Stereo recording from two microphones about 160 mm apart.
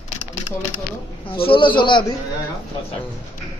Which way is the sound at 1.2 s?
35° left (ahead or behind).